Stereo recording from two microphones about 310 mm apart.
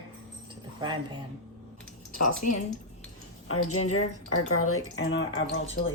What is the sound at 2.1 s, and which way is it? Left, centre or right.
Speech, left.